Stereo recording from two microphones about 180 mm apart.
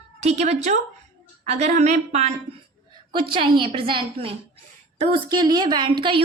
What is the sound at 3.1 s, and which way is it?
A woman's voice, 30° right (ahead or behind).